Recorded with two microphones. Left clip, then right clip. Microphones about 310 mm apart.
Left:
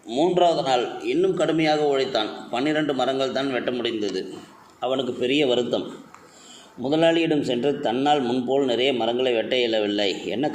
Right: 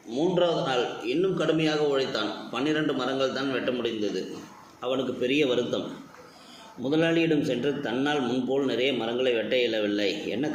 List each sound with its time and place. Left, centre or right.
0.1 s a man's voice: left
6.8 s a man's voice: left